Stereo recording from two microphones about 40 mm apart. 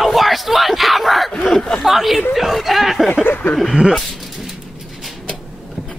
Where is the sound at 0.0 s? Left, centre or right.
Centre.